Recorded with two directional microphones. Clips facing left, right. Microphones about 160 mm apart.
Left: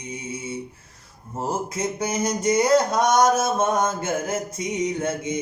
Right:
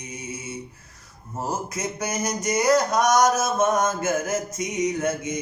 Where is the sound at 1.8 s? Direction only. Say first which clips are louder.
Left 3 dB; 25° left (ahead or behind).